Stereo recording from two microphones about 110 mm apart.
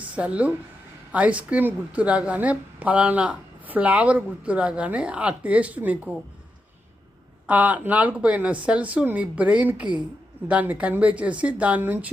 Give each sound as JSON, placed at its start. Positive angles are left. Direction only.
{"t": 0.0, "sound": "a woman's voice", "side_deg": -10}
{"t": 7.4, "sound": "a woman's voice", "side_deg": -15}